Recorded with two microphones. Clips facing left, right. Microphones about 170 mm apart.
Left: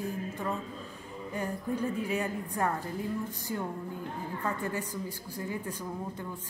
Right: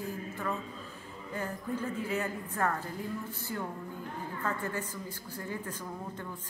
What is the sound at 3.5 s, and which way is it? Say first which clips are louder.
Music: left 2 dB; 20° left (ahead or behind).